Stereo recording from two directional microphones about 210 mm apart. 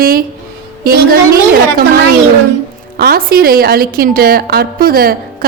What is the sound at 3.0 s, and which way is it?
Speech, 45° right (ahead or behind).